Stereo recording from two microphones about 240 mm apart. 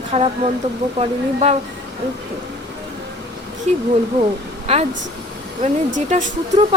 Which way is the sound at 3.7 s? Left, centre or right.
Right.